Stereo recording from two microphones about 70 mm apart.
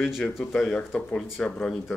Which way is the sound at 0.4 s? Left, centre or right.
Centre.